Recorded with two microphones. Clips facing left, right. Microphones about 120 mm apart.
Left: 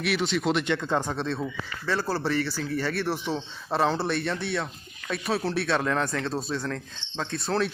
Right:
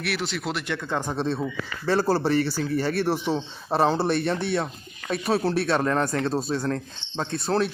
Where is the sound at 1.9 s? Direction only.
40° right (ahead or behind).